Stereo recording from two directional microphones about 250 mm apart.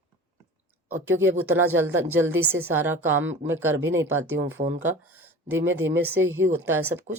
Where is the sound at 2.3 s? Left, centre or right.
Right.